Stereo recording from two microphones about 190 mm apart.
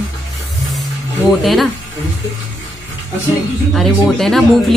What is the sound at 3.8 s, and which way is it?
Speech, centre (ahead or behind).